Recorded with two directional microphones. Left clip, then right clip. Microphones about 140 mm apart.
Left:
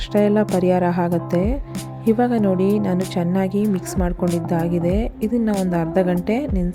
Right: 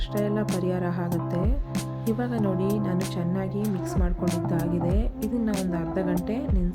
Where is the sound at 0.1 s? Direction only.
55° left (ahead or behind).